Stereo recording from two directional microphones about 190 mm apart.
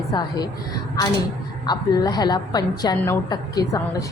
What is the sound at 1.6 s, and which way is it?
A woman's voice, 20° left (ahead or behind).